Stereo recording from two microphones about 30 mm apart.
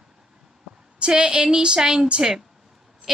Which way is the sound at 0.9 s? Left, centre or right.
Right.